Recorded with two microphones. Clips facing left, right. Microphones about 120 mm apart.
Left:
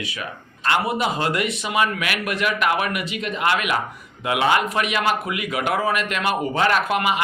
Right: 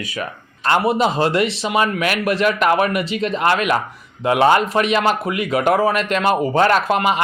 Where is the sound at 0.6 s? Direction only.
30° right (ahead or behind).